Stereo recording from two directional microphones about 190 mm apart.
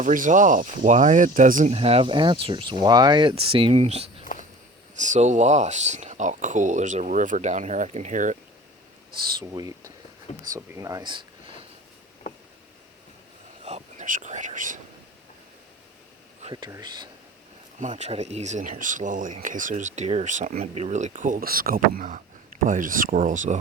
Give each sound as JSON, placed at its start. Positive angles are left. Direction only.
{"t": 0.0, "sound": "speech", "side_deg": -45}
{"t": 1.7, "sound": "speech", "side_deg": -30}
{"t": 9.4, "sound": "speech", "side_deg": -20}
{"t": 13.7, "sound": "speech", "side_deg": -40}
{"t": 16.4, "sound": "a sound", "side_deg": -30}
{"t": 16.6, "sound": "speech", "side_deg": -20}
{"t": 17.7, "sound": "speech", "side_deg": -40}